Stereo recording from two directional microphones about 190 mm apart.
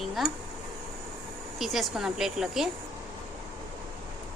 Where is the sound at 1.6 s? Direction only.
Centre (ahead or behind).